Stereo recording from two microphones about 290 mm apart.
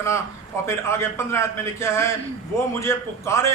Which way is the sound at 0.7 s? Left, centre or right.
Centre.